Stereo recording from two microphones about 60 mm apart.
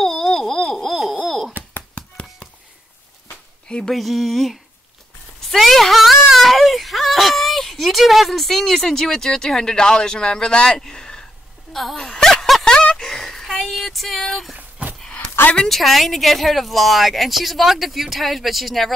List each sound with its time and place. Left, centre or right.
0.0 s a sound: centre
0.6 s owl: centre
1.2 s wail: centre
1.8 s tap: centre
3.6 s speech: centre
3.9 s speech: centre
5.4 s a sound: centre
14.6 s a sound: right
15.4 s speech: left
15.7 s speech: centre